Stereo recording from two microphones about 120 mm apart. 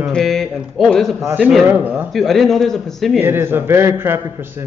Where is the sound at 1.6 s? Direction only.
15° right (ahead or behind).